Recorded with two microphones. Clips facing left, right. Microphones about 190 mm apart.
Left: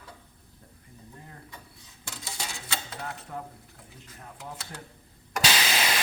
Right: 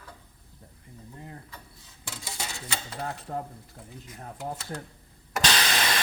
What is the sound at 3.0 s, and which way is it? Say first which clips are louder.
Speech: right 4 dB; 35° right (ahead or behind).